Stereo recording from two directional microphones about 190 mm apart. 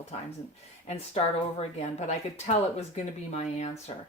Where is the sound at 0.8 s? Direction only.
35° left (ahead or behind).